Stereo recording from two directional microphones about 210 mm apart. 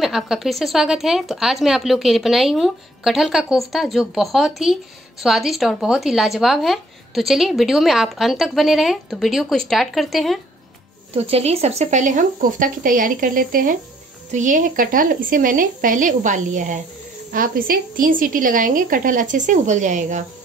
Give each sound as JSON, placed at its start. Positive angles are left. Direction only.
{"t": 0.0, "sound": "speech", "side_deg": 0}
{"t": 11.1, "sound": "a woman's voice", "side_deg": -30}